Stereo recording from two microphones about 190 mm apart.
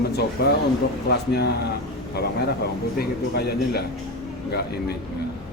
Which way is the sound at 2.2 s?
55° left (ahead or behind).